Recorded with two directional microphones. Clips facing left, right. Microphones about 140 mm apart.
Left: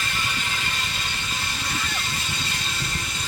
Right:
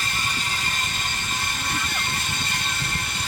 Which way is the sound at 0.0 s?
40° right (ahead or behind).